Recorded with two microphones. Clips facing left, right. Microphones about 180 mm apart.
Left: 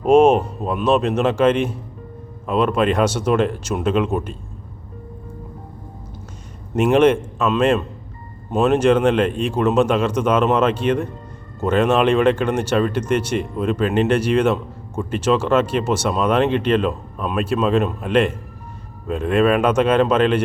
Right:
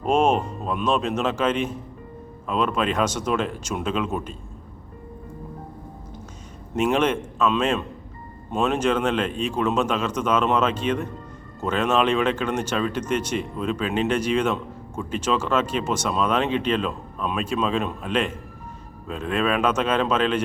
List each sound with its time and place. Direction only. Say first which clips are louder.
0.0 s speech: left 7 dB; 10° left (ahead or behind)
6.7 s speech: left 7 dB; 10° left (ahead or behind)
16.4 s speech: left 6 dB; 55° left (ahead or behind)
16.8 s speech: left 5 dB; 5° left (ahead or behind)